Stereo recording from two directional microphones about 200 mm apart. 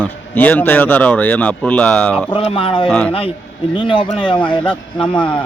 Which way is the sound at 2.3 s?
25° left (ahead or behind).